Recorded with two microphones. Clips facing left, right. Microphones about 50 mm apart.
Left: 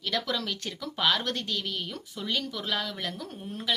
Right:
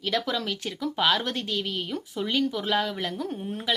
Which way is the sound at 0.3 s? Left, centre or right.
Centre.